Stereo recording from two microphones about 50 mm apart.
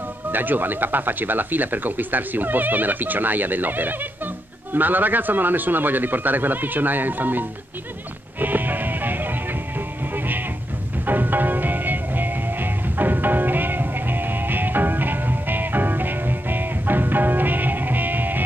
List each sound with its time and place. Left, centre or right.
0.3 s speech: right
8.4 s music: right